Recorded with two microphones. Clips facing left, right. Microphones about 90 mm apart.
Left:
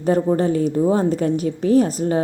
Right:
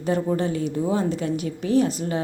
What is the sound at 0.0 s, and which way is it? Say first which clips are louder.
A woman's voice: left 5 dB; 40° left (ahead or behind).